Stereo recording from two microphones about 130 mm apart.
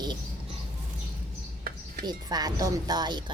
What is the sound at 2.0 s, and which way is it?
Music, 30° right (ahead or behind).